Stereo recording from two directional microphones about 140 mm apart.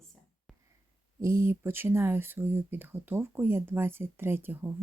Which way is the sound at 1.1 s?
20° right (ahead or behind).